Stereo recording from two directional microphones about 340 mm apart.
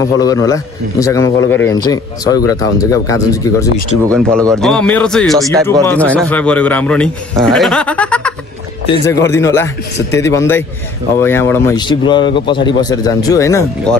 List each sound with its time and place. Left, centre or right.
0.0 s a man's voice: centre
5.5 s speech: centre
5.9 s a man's voice: centre